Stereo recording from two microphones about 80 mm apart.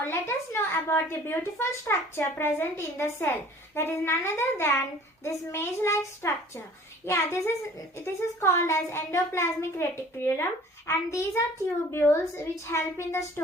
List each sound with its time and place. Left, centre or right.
0.0 s a child's voice: left